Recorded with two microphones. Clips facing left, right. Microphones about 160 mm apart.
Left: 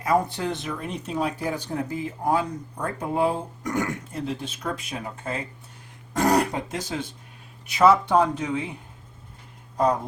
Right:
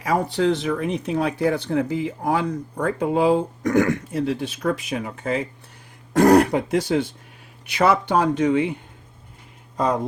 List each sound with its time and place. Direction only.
0.0 s speech: 90° right
6.1 s speech: 65° right (ahead or behind); by 8.7 s 85° right
9.7 s speech: 90° right